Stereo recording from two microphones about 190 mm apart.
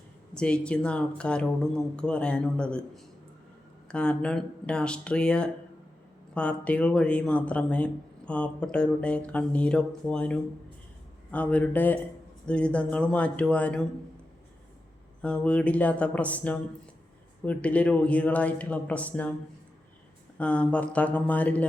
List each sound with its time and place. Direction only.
0.3 s speech: 5° left (ahead or behind)
15.2 s speech: 5° left (ahead or behind)
20.4 s speech: 5° left (ahead or behind)